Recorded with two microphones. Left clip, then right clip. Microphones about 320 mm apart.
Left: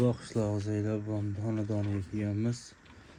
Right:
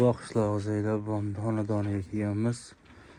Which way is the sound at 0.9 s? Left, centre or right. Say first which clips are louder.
Right 4 dB; right.